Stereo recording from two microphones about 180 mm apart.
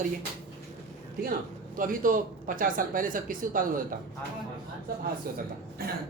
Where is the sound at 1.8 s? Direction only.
50° right (ahead or behind).